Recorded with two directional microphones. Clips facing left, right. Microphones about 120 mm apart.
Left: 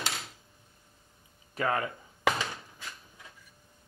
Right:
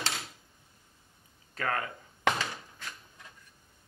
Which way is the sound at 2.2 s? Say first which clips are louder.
Even; 5° left (ahead or behind).